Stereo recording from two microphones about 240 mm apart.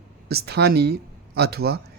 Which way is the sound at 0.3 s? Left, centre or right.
Right.